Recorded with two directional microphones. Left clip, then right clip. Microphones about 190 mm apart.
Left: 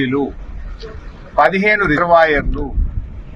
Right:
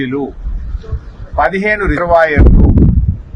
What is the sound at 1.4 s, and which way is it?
Speech, 25° right (ahead or behind).